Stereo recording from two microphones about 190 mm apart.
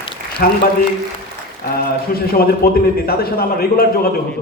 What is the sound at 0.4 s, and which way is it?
Speech, 55° left (ahead or behind).